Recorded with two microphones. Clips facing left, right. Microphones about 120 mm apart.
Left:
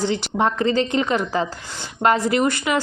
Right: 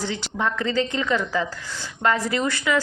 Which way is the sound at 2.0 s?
45° left (ahead or behind).